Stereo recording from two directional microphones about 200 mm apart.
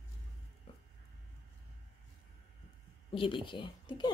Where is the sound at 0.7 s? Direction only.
30° left (ahead or behind).